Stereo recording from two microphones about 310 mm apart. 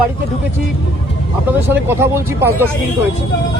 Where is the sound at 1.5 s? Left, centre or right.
Centre.